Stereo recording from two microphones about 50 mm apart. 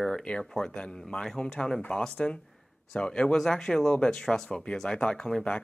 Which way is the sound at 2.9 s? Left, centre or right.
Centre.